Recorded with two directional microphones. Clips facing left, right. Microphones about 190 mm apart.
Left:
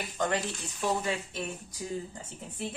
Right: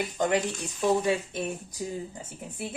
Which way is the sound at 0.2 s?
15° right (ahead or behind).